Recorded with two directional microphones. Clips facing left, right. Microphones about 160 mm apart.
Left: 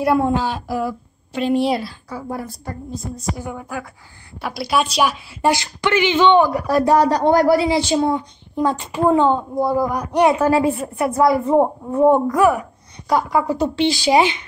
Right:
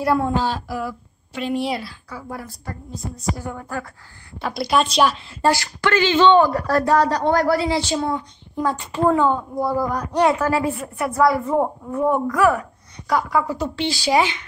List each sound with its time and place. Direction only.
0.0 s a woman's voice: 15° left (ahead or behind)
3.3 s a woman's voice: 10° left (ahead or behind)